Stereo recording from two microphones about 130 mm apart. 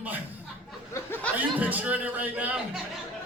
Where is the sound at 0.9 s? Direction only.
15° left (ahead or behind).